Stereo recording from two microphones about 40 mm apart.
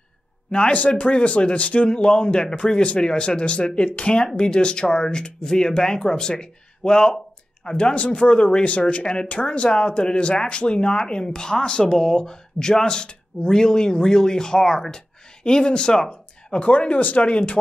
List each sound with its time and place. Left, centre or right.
0.5 s speech: left
0.7 s speech: left
1.9 s speech: left